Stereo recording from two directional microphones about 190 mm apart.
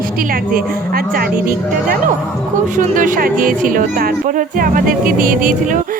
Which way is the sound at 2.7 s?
45° right (ahead or behind).